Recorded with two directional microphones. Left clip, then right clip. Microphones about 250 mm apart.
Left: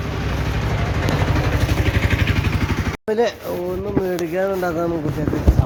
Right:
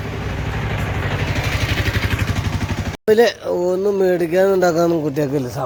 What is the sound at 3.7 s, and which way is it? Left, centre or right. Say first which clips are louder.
Speech: right 7 dB; right.